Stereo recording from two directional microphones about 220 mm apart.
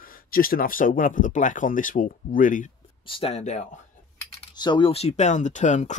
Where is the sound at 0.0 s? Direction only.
40° left (ahead or behind).